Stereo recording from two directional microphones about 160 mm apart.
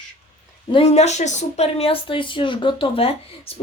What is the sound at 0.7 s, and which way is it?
Speech, 40° left (ahead or behind).